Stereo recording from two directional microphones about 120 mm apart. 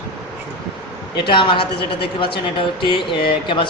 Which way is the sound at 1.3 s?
45° left (ahead or behind).